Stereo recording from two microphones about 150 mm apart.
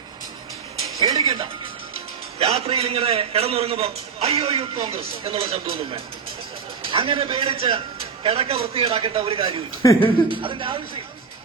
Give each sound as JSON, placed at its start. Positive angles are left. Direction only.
{"t": 1.0, "sound": "television", "side_deg": -25}
{"t": 2.4, "sound": "a man's voice", "side_deg": -40}
{"t": 9.8, "sound": "speech", "side_deg": 20}
{"t": 10.2, "sound": "a man's voice", "side_deg": -35}